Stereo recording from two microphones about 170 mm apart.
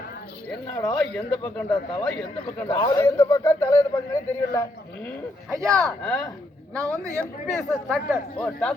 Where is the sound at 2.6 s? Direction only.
25° left (ahead or behind).